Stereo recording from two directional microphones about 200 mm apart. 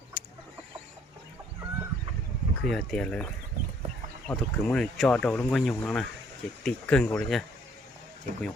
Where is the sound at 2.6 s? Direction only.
Centre (ahead or behind).